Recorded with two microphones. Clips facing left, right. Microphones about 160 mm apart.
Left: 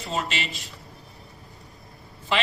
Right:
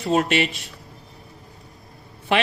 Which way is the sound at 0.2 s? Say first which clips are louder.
Right 9 dB; 60° right (ahead or behind).